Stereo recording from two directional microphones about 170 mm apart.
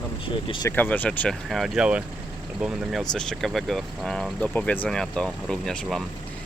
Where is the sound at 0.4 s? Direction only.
30° left (ahead or behind).